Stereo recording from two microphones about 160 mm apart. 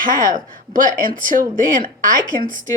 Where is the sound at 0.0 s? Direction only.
55° right (ahead or behind).